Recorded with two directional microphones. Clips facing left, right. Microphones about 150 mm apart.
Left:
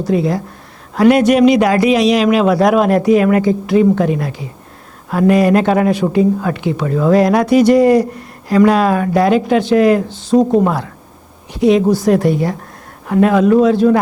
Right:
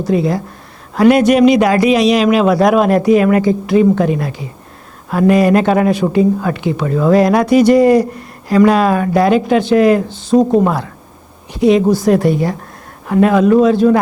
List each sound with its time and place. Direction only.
0.9 s a man's voice: 20° right (ahead or behind)